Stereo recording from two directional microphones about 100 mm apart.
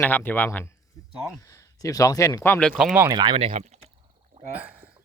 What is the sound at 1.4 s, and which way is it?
Speech, 35° left (ahead or behind).